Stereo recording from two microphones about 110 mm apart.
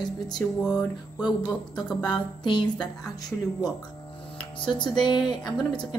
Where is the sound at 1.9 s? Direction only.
40° left (ahead or behind).